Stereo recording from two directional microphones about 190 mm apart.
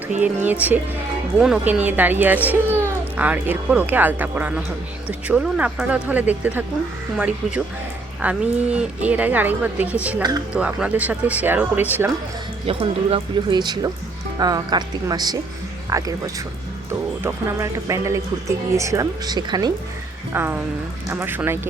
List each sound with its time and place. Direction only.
0.2 s speech: 10° right (ahead or behind)
8.2 s speech: 5° right (ahead or behind)
12.6 s speech: 30° right (ahead or behind)
20.3 s speech: 10° right (ahead or behind)